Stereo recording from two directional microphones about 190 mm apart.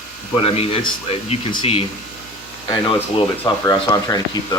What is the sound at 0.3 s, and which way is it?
Speech, 30° left (ahead or behind).